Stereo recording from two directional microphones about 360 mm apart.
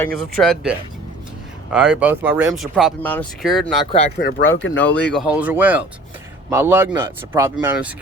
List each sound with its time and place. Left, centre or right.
0.2 s speech: centre
4.2 s speech: left
4.8 s speech: centre